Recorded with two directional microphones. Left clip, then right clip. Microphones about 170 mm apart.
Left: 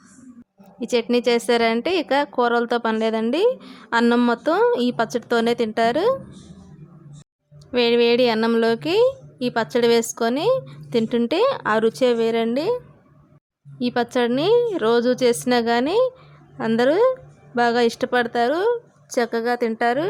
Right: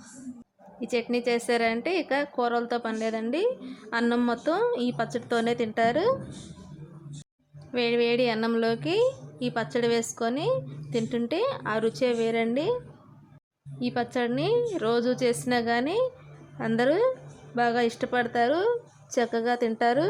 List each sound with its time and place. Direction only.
0.8 s a woman's voice: 20° left (ahead or behind)
7.7 s a woman's voice: 25° left (ahead or behind)
13.7 s a woman's voice: 25° left (ahead or behind); by 20.1 s 5° left (ahead or behind)